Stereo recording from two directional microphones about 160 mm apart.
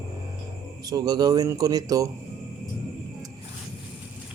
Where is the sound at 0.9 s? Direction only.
25° right (ahead or behind).